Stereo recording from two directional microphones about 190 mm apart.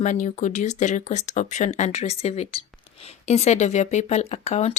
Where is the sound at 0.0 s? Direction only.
40° left (ahead or behind).